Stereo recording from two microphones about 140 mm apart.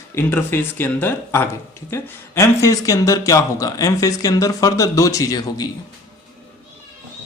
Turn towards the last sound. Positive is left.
turn(degrees=25)  # may be behind; listen again after turning